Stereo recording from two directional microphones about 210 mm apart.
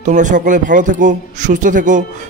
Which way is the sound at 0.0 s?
35° right (ahead or behind).